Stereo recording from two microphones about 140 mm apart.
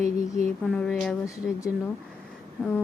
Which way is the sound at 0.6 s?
5° left (ahead or behind).